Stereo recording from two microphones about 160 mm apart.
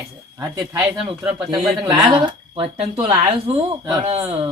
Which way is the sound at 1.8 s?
20° right (ahead or behind).